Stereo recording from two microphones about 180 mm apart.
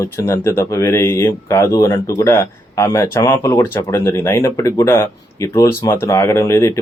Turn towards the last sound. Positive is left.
turn(degrees=15)  # may be behind; listen again after turning